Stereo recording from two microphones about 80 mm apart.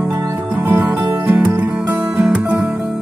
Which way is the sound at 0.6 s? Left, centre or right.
Right.